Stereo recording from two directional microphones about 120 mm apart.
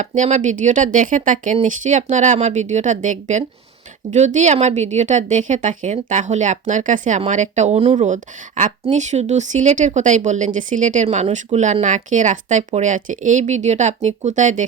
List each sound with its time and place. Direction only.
0.0 s speech: 85° right
8.9 s speech: 75° right (ahead or behind)